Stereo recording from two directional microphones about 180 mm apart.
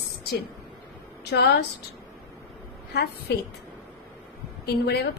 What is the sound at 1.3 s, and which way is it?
Speech, 65° left (ahead or behind).